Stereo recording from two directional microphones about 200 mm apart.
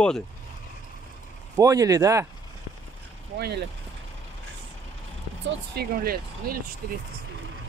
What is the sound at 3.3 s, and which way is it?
Speech, 55° right (ahead or behind).